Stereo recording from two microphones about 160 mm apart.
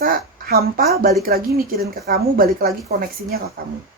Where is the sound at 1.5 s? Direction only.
70° right (ahead or behind).